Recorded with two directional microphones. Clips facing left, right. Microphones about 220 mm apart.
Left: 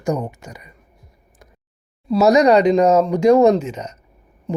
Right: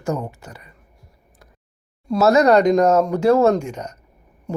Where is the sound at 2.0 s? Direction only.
15° left (ahead or behind).